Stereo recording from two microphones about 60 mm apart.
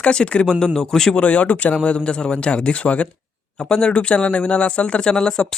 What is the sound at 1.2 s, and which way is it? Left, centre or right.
Speech, left.